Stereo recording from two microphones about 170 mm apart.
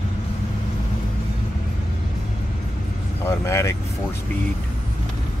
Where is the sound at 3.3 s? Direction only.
15° left (ahead or behind).